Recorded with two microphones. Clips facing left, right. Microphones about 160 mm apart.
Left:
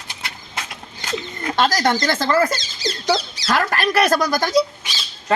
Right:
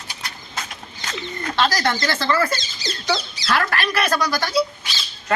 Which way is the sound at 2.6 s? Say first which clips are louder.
Left 4 dB; 90° left.